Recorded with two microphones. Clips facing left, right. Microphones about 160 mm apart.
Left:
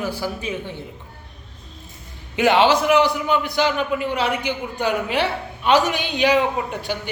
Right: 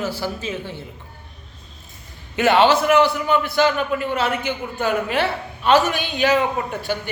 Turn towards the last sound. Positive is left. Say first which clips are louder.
# right 1 dB
turn(degrees=15)  # may be behind; listen again after turning